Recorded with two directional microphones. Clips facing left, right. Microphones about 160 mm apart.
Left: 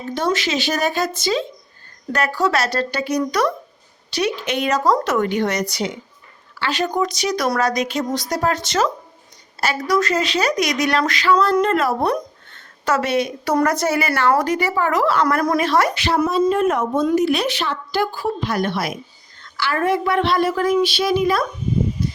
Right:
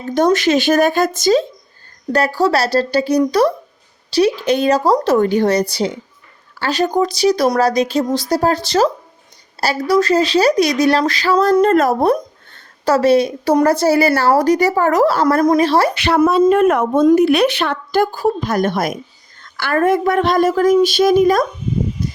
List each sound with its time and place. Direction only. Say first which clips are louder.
0.1 s a woman's voice: right 8 dB; 45° right (ahead or behind)
2.1 s speech: right 4 dB; 30° right (ahead or behind)
16.0 s a woman's voice: right 5 dB; 65° right (ahead or behind); by 21.4 s 45° right (ahead or behind)